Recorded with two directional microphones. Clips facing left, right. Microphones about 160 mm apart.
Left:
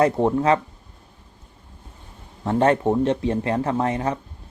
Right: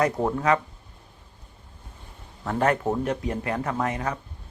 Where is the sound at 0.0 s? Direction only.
25° left (ahead or behind).